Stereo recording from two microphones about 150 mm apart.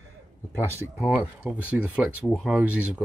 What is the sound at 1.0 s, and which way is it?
Speech, 10° right (ahead or behind).